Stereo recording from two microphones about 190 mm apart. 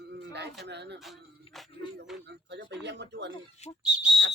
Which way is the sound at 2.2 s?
60° right (ahead or behind).